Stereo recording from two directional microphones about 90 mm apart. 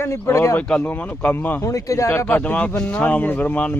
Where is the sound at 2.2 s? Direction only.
15° left (ahead or behind).